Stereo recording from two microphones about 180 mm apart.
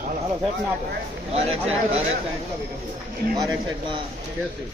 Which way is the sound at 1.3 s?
35° right (ahead or behind).